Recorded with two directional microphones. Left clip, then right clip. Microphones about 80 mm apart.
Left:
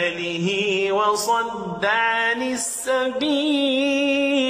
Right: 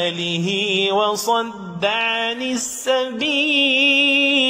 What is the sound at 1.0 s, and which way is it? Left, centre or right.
Music, right.